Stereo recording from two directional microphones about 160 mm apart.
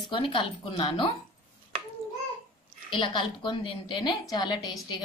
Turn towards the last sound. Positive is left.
turn(degrees=25)  # may be behind; listen again after turning